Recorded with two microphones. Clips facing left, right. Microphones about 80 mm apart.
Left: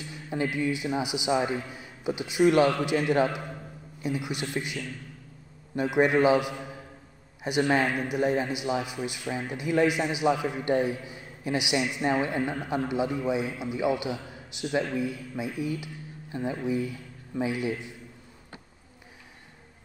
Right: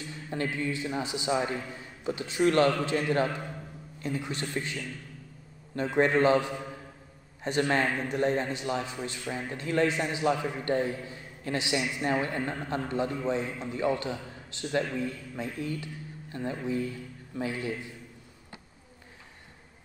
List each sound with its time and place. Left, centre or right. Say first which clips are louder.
0.1 s a man's voice: left 3 dB; centre
5.8 s a man's voice: left 2 dB; centre